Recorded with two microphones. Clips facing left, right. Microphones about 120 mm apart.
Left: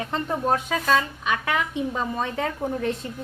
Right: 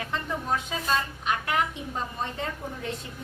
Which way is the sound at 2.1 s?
75° left (ahead or behind).